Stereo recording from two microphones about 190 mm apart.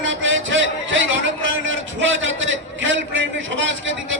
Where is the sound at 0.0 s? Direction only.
80° right.